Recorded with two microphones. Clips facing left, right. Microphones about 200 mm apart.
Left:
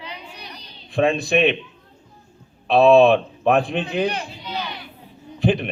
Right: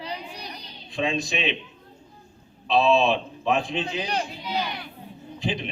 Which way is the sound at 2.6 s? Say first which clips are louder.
Left 8 dB; 60° left (ahead or behind).